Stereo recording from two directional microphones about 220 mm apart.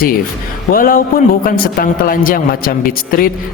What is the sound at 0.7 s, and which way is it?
A man's voice, 40° left (ahead or behind).